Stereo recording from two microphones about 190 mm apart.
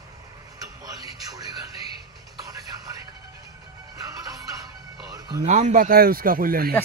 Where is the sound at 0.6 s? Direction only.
20° right (ahead or behind).